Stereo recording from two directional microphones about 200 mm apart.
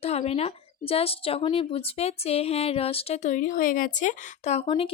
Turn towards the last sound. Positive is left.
turn(degrees=25)  # may be behind; listen again after turning